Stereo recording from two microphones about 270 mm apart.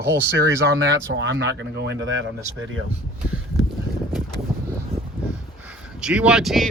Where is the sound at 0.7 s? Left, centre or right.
Right.